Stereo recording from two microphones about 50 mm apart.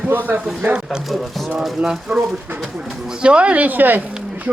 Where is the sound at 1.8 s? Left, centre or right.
Right.